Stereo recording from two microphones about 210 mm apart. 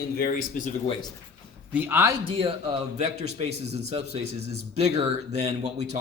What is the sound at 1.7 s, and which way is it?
A man's voice, 10° right (ahead or behind).